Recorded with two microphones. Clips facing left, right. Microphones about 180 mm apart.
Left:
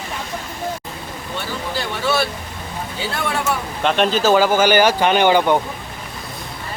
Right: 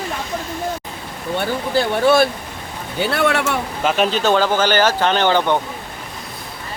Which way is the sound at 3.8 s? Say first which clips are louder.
Left 1 dB; 5° right (ahead or behind).